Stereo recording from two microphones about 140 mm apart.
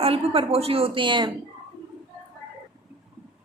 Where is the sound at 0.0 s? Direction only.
45° right (ahead or behind).